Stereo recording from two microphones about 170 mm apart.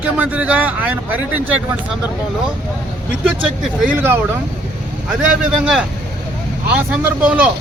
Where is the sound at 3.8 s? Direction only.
10° right (ahead or behind).